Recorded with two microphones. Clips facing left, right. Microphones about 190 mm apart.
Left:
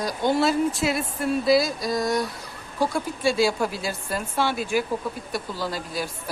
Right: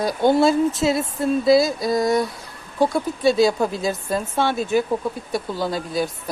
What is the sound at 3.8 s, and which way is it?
Speech, 20° right (ahead or behind).